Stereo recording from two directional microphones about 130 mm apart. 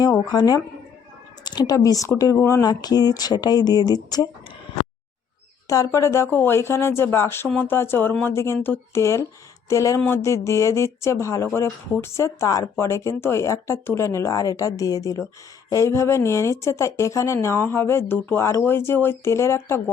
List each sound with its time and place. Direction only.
0.3 s speech: 30° left (ahead or behind)
5.6 s speech: 25° left (ahead or behind)